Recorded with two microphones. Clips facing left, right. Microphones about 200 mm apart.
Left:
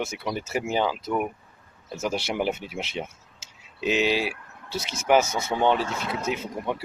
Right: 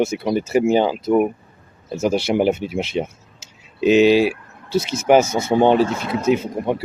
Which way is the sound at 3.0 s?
35° right (ahead or behind).